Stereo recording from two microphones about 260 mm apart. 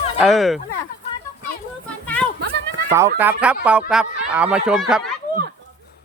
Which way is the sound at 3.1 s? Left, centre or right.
Centre.